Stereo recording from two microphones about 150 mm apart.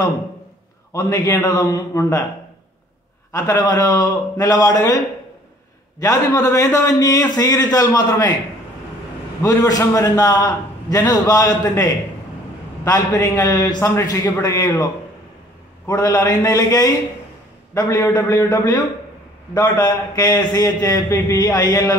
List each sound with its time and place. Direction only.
0.9 s a man's voice: 20° left (ahead or behind)
3.3 s a man's voice: 20° left (ahead or behind)
9.4 s a man's voice: 20° left (ahead or behind)
16.0 s a man's voice: 25° left (ahead or behind)